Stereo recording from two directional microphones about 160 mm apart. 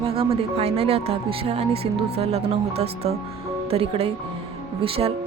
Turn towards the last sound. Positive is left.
turn(degrees=-35)  # may be behind; listen again after turning